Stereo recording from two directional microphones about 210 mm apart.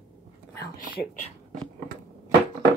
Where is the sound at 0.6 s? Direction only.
45° left (ahead or behind).